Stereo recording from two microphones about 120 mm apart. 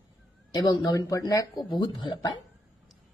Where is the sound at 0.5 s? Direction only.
35° left (ahead or behind).